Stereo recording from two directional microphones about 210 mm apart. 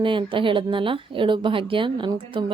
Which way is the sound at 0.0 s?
25° right (ahead or behind).